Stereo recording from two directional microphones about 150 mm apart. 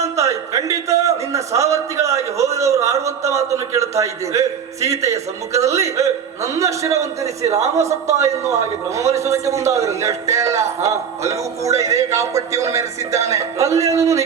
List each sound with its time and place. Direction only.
0.0 s a man's voice: 20° right (ahead or behind)